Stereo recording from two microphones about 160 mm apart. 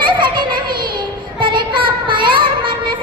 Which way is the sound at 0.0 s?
30° right (ahead or behind).